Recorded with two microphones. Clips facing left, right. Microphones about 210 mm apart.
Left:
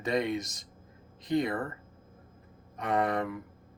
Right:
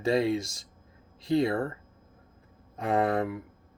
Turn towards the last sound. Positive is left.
turn(degrees=-25)  # may be behind; listen again after turning